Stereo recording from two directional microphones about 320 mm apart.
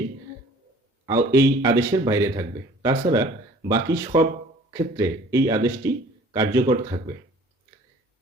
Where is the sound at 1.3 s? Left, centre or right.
Centre.